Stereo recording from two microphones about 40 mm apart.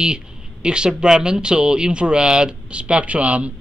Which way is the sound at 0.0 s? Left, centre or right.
Right.